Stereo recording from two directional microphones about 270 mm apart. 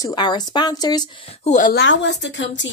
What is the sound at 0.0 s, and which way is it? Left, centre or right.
Speech, centre.